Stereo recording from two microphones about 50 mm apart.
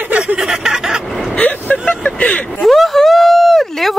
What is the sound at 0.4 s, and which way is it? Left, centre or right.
Snicker, centre.